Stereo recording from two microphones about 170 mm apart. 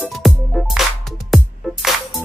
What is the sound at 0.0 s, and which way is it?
Music, centre (ahead or behind).